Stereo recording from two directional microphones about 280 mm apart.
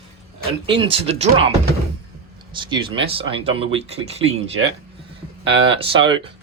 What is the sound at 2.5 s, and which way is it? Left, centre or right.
Speech, centre.